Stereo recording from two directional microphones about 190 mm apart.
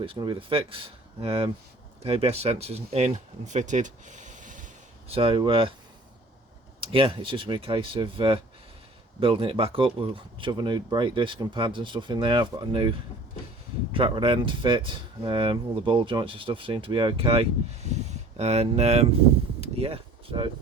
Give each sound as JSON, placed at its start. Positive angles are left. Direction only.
{"t": 0.0, "sound": "speech", "side_deg": -25}
{"t": 3.4, "sound": "a sound", "side_deg": -40}
{"t": 5.1, "sound": "speech", "side_deg": -30}
{"t": 6.7, "sound": "speech", "side_deg": -30}
{"t": 13.9, "sound": "speech", "side_deg": -30}